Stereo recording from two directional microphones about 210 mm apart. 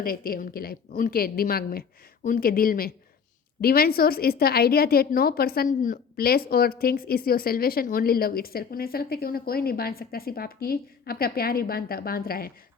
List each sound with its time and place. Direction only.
0.0 s a woman's voice: 45° left (ahead or behind)